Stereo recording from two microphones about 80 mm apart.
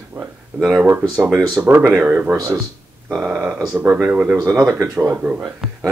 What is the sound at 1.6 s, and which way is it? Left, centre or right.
Speech, right.